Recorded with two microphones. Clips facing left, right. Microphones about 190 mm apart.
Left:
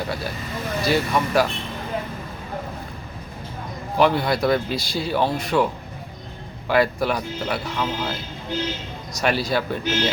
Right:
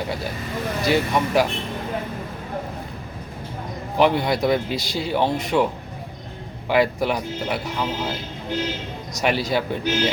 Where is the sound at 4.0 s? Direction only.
15° right (ahead or behind).